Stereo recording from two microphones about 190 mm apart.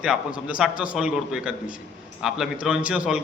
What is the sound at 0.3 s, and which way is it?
A man's voice, 5° right (ahead or behind).